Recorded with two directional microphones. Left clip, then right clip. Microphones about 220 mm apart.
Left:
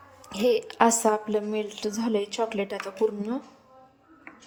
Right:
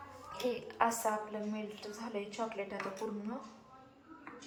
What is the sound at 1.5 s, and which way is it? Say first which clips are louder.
Speech: left 13 dB; 30° left (ahead or behind).